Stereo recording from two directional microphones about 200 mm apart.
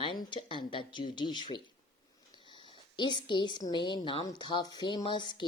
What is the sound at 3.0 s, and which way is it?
Speech, 25° left (ahead or behind).